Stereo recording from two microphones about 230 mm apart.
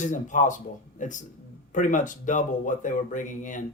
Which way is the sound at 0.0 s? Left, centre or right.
Left.